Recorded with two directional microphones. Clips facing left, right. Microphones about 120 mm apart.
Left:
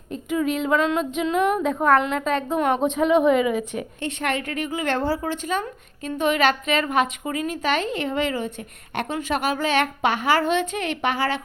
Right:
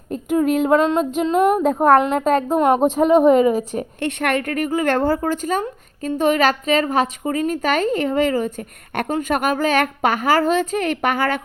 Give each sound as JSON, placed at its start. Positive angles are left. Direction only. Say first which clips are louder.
{"t": 0.1, "sound": "female singing", "louder": "right 6 dB", "side_deg": -45}
{"t": 4.0, "sound": "a woman's voice", "louder": "right 5 dB", "side_deg": -60}